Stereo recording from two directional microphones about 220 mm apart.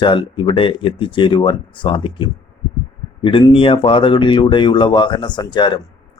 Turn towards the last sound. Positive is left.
turn(degrees=20)  # may be behind; listen again after turning